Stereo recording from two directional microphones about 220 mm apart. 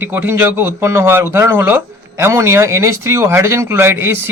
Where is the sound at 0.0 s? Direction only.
10° right (ahead or behind).